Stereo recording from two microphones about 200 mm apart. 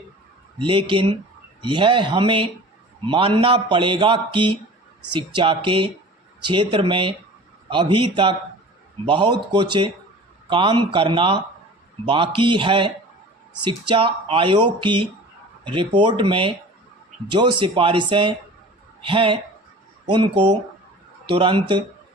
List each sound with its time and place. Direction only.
0.6 s a man's voice: 25° right (ahead or behind)